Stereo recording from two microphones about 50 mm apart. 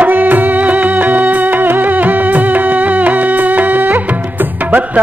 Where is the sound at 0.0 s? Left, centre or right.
Right.